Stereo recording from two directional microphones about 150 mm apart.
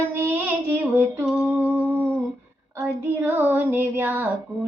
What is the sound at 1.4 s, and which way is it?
Humming, 10° right (ahead or behind).